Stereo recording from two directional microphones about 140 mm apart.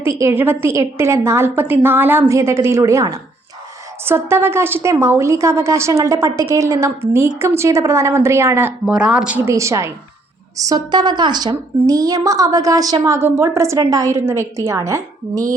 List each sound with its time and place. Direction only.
0.0 s a woman's voice: 20° right (ahead or behind)
8.9 s a woman's voice: 5° right (ahead or behind); by 15.5 s 20° right (ahead or behind)